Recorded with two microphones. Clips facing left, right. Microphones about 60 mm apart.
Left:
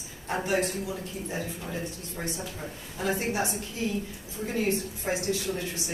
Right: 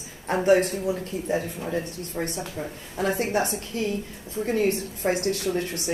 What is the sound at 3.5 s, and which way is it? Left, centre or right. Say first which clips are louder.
A woman's voice: right 3 dB; right.